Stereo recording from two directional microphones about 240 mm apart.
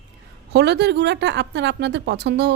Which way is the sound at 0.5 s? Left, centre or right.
Right.